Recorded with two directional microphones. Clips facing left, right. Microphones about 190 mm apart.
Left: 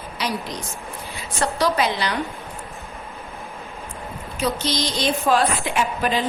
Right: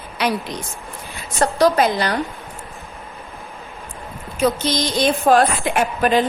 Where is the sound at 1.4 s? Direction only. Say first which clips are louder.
Right 5 dB; 45° right (ahead or behind).